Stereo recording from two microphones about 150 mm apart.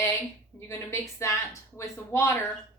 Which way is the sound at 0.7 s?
15° left (ahead or behind).